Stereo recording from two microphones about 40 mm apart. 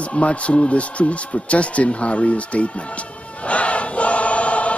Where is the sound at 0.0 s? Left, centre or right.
Left.